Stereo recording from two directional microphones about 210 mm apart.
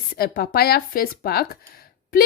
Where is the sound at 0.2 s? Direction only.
45° left (ahead or behind).